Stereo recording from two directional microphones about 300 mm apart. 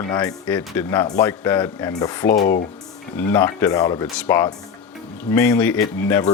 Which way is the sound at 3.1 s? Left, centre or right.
Centre.